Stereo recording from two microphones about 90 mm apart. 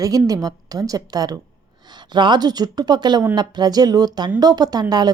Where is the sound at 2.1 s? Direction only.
55° right (ahead or behind).